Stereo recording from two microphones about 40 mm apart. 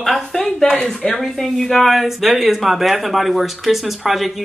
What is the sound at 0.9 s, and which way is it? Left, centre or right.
A woman's voice, centre.